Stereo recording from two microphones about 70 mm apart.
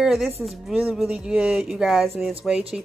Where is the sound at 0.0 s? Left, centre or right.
Centre.